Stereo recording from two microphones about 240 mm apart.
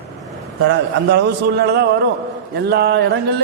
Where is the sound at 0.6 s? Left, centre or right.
Right.